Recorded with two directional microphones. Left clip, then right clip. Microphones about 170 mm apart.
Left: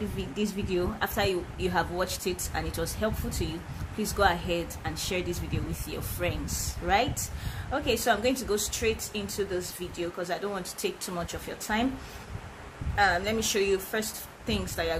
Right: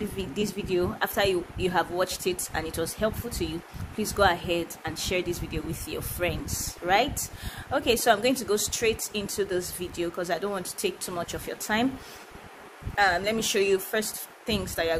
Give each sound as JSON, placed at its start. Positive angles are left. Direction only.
{"t": 0.2, "sound": "speech", "side_deg": -45}
{"t": 12.9, "sound": "speech", "side_deg": -35}